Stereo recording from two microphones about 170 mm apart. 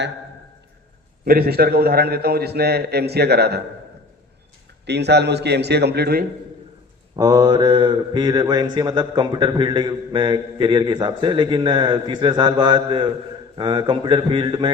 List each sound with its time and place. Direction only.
1.2 s a man's voice: 60° right (ahead or behind)
4.9 s a man's voice: 80° right
7.2 s mantra: 25° right (ahead or behind)